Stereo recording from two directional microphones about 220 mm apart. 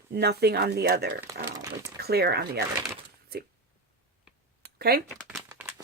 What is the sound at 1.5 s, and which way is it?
Speech, 15° right (ahead or behind).